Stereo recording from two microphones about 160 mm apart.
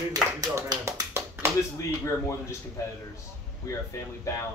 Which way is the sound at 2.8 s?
20° left (ahead or behind).